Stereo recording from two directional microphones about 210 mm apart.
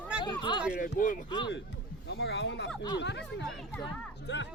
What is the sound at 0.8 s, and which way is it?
Speech, 40° left (ahead or behind).